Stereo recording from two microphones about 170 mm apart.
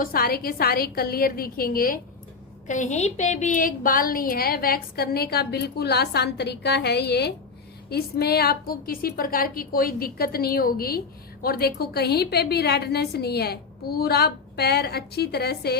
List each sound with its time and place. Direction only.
0.0 s a woman's voice: 60° left (ahead or behind)
2.6 s a woman's voice: 45° left (ahead or behind); by 15.7 s 70° left (ahead or behind)